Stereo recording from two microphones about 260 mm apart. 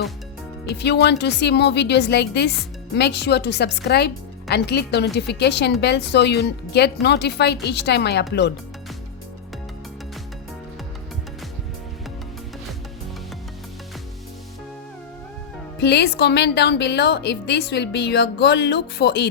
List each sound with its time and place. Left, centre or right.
0.6 s a woman's voice: left
15.8 s a woman's voice: left